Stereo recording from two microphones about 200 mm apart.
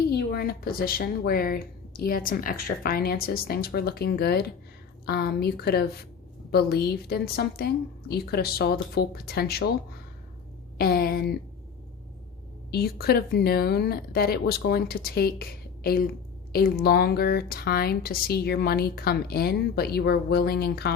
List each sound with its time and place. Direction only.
0.1 s speech: 50° left (ahead or behind)
10.8 s speech: 50° left (ahead or behind)
12.7 s speech: 50° left (ahead or behind)